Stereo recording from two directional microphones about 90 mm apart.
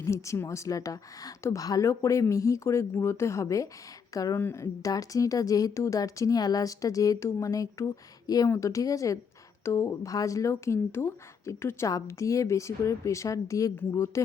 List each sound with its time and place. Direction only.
0.0 s speech: 35° left (ahead or behind)
4.4 s speech: 25° left (ahead or behind)